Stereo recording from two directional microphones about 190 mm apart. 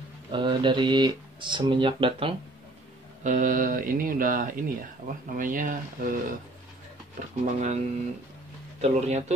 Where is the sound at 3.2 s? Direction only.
45° right (ahead or behind).